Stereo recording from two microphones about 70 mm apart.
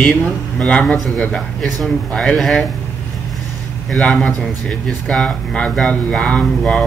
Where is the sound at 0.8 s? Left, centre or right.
Centre.